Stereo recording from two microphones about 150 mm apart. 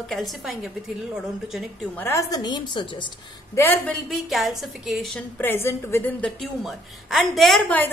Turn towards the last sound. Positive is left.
turn(degrees=0)  # may be behind; listen again after turning